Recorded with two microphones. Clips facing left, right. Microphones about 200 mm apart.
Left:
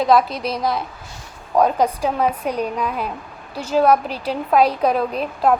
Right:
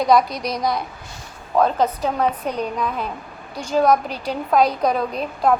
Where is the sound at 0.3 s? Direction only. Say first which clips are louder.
Left 1 dB; 30° left (ahead or behind).